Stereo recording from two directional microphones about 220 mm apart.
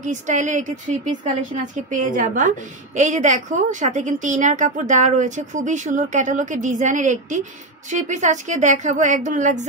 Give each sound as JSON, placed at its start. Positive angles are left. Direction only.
{"t": 0.0, "sound": "a woman's voice", "side_deg": -35}